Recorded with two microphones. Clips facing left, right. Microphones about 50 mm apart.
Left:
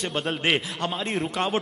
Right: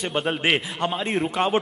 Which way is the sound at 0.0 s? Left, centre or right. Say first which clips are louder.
Right 2 dB; centre.